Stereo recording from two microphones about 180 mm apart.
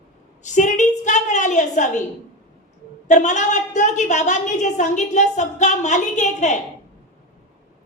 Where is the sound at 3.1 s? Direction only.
40° left (ahead or behind).